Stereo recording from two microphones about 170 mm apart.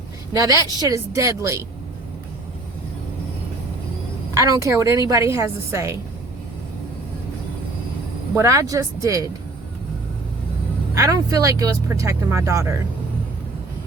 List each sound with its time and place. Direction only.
0.3 s speech: 20° right (ahead or behind)
4.4 s speech: 20° right (ahead or behind)
8.4 s speech: 20° right (ahead or behind)
10.9 s speech: 20° right (ahead or behind)